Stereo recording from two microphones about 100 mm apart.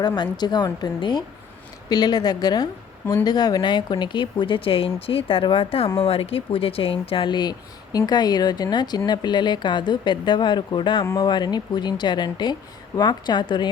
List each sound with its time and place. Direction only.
0.2 s a woman's voice: 45° left (ahead or behind)
11.0 s a woman's voice: 35° left (ahead or behind)
11.3 s speech: 45° left (ahead or behind)